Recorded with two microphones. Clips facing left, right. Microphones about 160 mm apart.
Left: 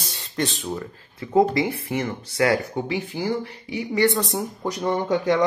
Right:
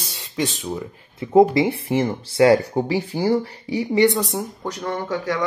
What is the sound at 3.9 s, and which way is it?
Speech, 15° right (ahead or behind).